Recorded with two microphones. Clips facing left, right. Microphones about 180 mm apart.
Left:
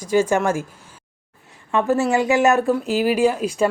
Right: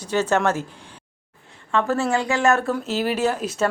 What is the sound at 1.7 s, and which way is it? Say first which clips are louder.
A woman's voice: left 3 dB; 15° left (ahead or behind).